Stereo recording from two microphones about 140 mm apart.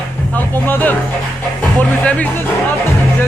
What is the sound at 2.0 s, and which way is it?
Speech, 10° left (ahead or behind).